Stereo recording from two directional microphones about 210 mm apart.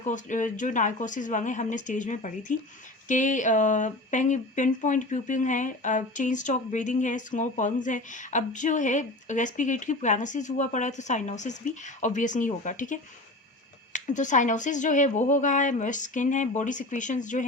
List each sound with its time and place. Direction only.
0.0 s speech: 35° left (ahead or behind)